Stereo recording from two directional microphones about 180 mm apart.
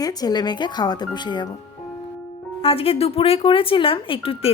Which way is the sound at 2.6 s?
30° left (ahead or behind).